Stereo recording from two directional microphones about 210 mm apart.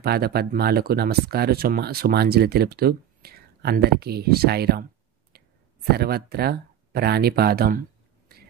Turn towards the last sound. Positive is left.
turn(degrees=-45)  # may be behind; listen again after turning